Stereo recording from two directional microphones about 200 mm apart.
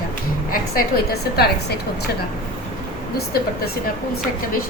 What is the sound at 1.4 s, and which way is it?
Speech, 50° left (ahead or behind).